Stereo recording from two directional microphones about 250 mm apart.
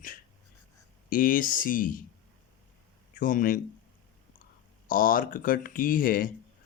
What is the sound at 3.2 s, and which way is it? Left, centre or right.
Speech, left.